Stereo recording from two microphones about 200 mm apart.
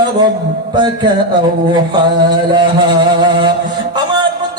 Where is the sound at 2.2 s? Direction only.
20° right (ahead or behind).